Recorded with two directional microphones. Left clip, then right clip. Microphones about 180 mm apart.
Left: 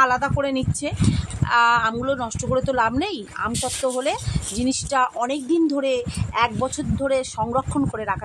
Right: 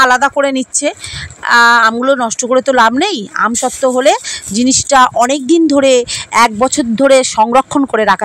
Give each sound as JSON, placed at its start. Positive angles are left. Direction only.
{"t": 0.0, "sound": "a woman's voice", "side_deg": -45}